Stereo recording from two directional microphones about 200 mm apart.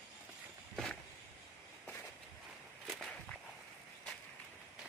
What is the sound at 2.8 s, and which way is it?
Walk, 5° left (ahead or behind).